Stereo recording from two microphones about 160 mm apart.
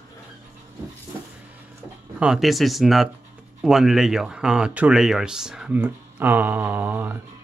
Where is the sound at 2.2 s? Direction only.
Centre (ahead or behind).